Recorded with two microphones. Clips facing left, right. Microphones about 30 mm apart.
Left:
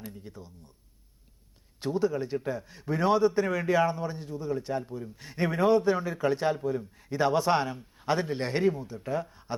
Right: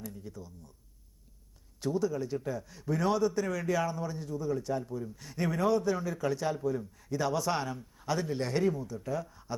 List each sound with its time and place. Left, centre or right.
0.0 s a man's voice: left
1.8 s a man's voice: left
9.3 s a sound: left